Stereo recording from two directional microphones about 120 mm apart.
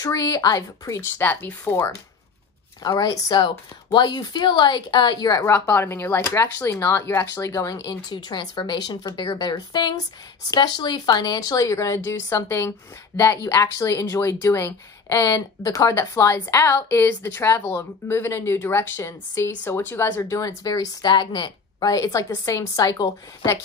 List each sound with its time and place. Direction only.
0.0 s a woman's voice: 30° left (ahead or behind)
1.1 s a woman's voice: 15° left (ahead or behind)
2.8 s a woman's voice: 35° left (ahead or behind)